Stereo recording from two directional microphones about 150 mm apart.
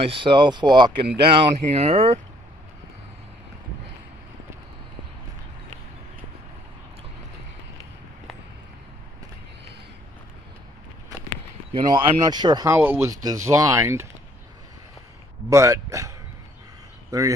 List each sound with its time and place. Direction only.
0.0 s speech: 35° right (ahead or behind)
1.4 s speech: 40° right (ahead or behind)
11.7 s speech: 30° right (ahead or behind)
12.7 s speech: 15° right (ahead or behind)
15.5 s speech: 20° right (ahead or behind)
17.1 s speech: 20° right (ahead or behind)